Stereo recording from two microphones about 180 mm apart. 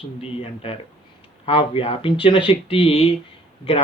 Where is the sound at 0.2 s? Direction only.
30° left (ahead or behind).